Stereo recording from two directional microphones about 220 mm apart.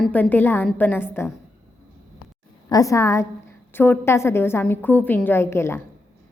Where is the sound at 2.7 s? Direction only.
15° left (ahead or behind).